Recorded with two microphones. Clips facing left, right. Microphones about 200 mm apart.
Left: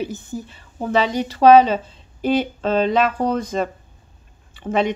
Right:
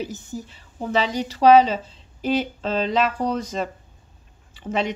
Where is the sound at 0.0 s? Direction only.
55° left (ahead or behind).